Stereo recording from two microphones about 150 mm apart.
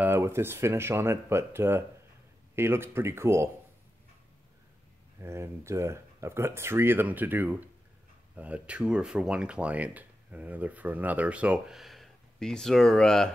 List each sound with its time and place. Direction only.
0.0 s speech: 15° right (ahead or behind)
5.2 s speech: 20° right (ahead or behind); by 13.3 s 5° left (ahead or behind)